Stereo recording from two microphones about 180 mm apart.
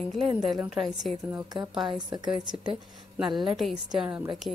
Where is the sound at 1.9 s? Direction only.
25° right (ahead or behind).